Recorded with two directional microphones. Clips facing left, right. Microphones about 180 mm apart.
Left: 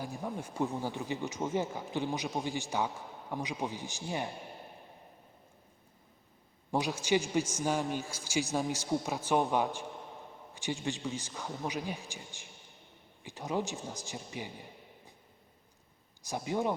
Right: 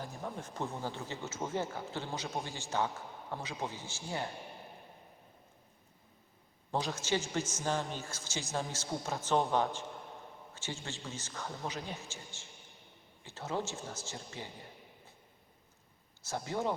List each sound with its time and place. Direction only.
0.0 s speech: 15° left (ahead or behind)
6.7 s speech: 15° left (ahead or behind)
16.2 s speech: 15° left (ahead or behind)